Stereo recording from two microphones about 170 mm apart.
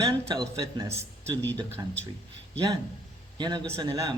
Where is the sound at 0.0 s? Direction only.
20° right (ahead or behind).